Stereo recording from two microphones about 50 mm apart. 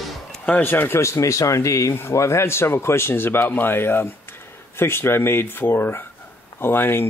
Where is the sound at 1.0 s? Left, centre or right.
Left.